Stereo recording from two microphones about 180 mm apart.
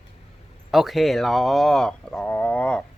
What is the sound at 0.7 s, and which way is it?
Speech, centre (ahead or behind).